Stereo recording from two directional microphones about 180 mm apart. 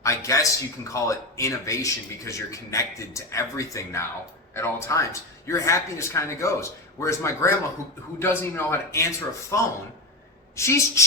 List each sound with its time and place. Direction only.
0.0 s a man's voice: 15° left (ahead or behind)